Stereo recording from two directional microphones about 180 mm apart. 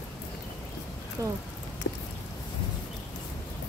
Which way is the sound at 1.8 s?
80° left.